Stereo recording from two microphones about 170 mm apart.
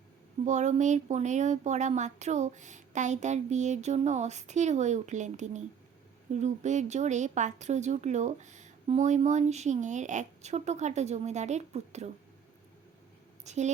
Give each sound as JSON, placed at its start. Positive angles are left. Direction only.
{"t": 0.4, "sound": "speech", "side_deg": -45}
{"t": 13.4, "sound": "a woman's voice", "side_deg": -45}